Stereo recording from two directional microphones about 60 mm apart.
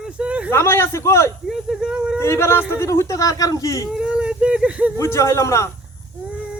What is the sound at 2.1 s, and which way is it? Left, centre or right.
A man's voice, left.